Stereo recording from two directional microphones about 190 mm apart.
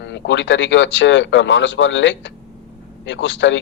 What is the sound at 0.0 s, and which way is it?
Speech, 70° left (ahead or behind).